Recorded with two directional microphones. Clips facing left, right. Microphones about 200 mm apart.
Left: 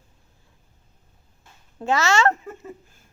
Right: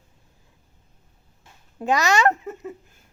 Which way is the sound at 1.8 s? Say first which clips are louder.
Even; 15° right (ahead or behind).